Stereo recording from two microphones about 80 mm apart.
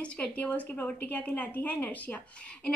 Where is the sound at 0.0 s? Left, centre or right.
Centre.